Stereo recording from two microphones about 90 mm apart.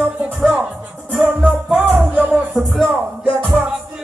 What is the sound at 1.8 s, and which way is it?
Music, 20° right (ahead or behind).